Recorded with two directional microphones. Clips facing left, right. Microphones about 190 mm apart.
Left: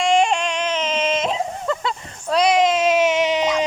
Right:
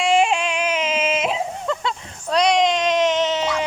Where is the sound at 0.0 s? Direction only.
5° right (ahead or behind).